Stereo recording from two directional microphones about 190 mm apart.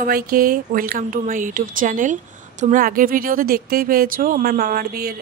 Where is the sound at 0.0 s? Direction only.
50° right (ahead or behind).